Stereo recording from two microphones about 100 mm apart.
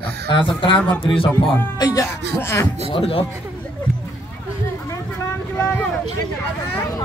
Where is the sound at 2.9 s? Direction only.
65° left (ahead or behind).